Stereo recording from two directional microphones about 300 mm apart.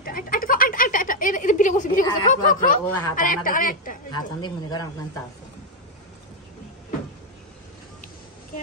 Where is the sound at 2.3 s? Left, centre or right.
Left.